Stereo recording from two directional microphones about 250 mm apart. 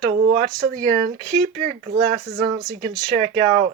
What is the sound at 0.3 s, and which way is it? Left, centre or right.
Speech, right.